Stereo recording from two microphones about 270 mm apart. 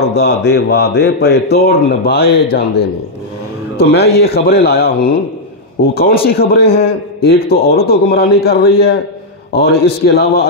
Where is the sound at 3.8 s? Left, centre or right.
Left.